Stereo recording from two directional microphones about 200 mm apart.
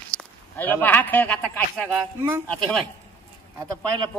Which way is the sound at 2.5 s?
5° left (ahead or behind).